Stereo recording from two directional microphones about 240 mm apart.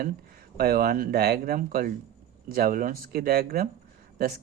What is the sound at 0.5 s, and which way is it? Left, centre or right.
A man's voice, right.